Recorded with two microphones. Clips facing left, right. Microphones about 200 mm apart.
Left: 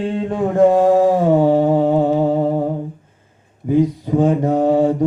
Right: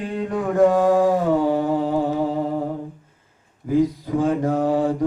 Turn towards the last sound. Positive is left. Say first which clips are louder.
# left 5 dB
turn(degrees=25)  # may be behind; listen again after turning